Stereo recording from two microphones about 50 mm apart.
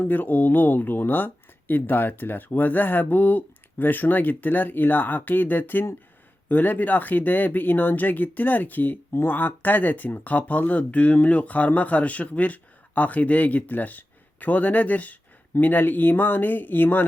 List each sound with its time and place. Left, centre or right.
0.0 s speech: left